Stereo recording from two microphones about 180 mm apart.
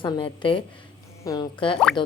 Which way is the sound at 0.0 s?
25° left (ahead or behind).